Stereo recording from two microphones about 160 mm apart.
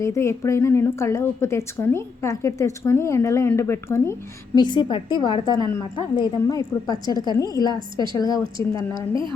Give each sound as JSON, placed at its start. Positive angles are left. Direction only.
{"t": 0.0, "sound": "a woman's voice", "side_deg": 15}
{"t": 4.5, "sound": "a woman's voice", "side_deg": 30}
{"t": 9.0, "sound": "a woman's voice", "side_deg": -30}